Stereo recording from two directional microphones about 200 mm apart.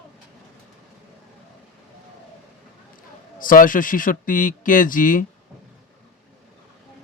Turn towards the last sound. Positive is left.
turn(degrees=40)  # may be behind; listen again after turning